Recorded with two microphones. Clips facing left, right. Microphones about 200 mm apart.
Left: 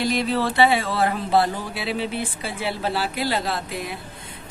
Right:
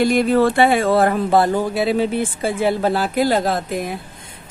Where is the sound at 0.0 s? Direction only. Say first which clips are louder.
Right 8 dB; 50° right (ahead or behind).